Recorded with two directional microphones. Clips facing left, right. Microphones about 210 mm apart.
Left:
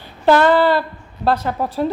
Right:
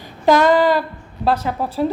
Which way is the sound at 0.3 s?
10° right (ahead or behind).